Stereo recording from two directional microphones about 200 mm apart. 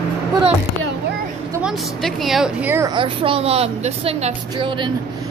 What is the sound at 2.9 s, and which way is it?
A woman's voice, 25° right (ahead or behind).